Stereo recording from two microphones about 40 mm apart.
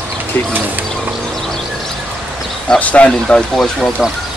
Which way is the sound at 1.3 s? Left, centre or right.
Centre.